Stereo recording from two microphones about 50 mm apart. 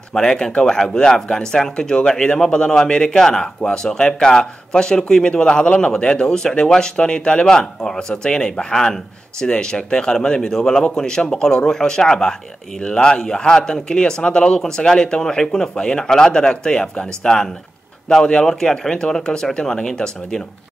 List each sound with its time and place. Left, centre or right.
0.1 s a man's voice: centre